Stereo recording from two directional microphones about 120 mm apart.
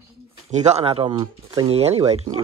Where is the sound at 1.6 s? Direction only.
60° right (ahead or behind).